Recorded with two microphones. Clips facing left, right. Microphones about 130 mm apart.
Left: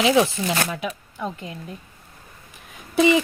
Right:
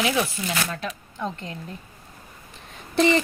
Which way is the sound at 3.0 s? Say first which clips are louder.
Left 2 dB; 10° left (ahead or behind).